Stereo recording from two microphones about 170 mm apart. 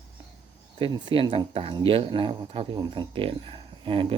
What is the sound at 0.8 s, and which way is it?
Speech, 30° right (ahead or behind).